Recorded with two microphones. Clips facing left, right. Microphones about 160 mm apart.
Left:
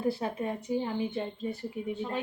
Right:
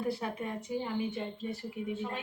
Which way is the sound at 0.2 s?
35° left (ahead or behind).